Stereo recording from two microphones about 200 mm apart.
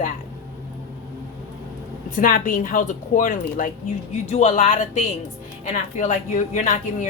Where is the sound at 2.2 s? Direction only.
45° left (ahead or behind).